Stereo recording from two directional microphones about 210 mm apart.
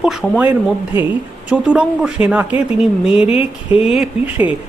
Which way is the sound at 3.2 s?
25° left (ahead or behind).